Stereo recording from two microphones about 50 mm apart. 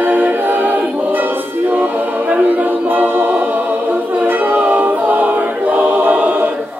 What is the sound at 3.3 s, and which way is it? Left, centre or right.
Music, right.